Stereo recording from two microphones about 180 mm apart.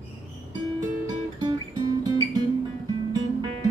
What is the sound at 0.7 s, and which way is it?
Music, 20° right (ahead or behind).